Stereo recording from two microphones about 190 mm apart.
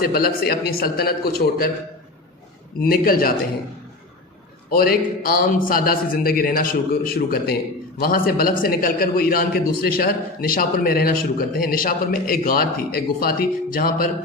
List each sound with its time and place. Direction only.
0.0 s a man's voice: 50° left (ahead or behind)
2.9 s a man's voice: 50° left (ahead or behind)
4.7 s a man's voice: 50° left (ahead or behind)